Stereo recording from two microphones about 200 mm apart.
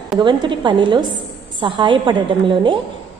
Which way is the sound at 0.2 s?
25° right (ahead or behind).